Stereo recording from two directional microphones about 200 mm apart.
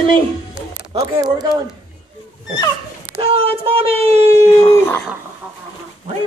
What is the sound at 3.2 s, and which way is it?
Speech, 30° right (ahead or behind).